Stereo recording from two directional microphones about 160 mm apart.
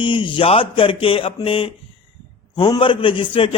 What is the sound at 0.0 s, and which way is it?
A man's voice, 30° left (ahead or behind).